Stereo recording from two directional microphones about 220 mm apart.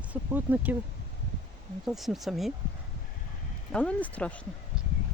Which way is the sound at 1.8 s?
Centre (ahead or behind).